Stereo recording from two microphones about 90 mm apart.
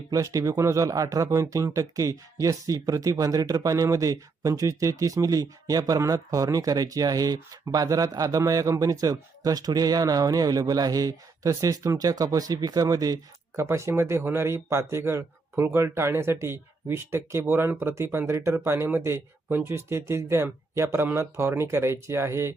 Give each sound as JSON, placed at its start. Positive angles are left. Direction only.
{"t": 0.1, "sound": "speech", "side_deg": -40}
{"t": 13.6, "sound": "speech", "side_deg": -30}